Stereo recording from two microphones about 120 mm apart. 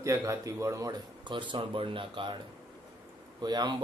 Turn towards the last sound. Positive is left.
turn(degrees=-35)  # may be behind; listen again after turning